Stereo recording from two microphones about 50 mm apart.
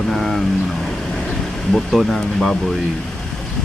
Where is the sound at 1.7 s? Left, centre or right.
Centre.